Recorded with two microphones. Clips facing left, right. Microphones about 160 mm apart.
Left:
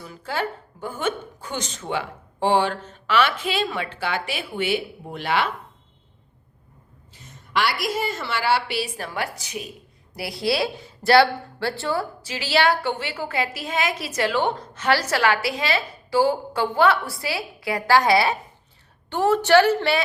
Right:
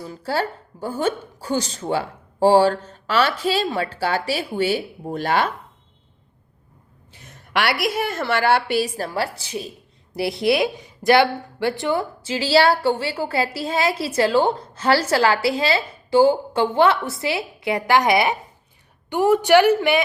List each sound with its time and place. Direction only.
0.0 s speech: 35° right (ahead or behind)
7.1 s a woman's voice: 60° right (ahead or behind); by 20.0 s 15° right (ahead or behind)